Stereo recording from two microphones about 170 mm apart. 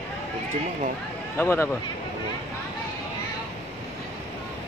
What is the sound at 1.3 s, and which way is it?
Speech, 15° left (ahead or behind).